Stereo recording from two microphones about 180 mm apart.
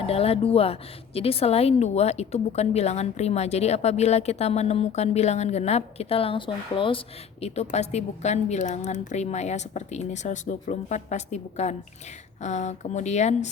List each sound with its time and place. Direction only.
0.0 s speech: 35° left (ahead or behind)